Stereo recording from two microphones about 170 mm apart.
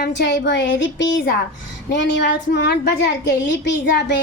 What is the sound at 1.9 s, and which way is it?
A child's voice, 90° left.